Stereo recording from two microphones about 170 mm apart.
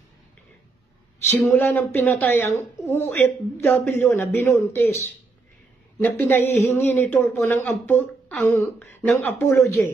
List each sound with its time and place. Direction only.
1.4 s speech: 15° left (ahead or behind)